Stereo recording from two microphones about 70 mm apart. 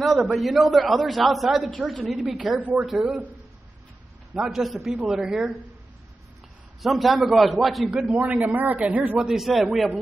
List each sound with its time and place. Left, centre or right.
0.0 s a man's voice: centre
2.6 s a man's voice: right
2.9 s a man's voice: centre
4.5 s a man's voice: centre
6.8 s a man's voice: centre
7.9 s a man's voice: centre
8.2 s a man's voice: right
9.2 s a man's voice: centre